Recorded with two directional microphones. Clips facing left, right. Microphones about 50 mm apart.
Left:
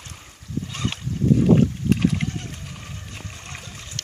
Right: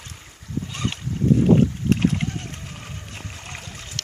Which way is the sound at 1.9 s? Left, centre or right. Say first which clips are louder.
Even; right.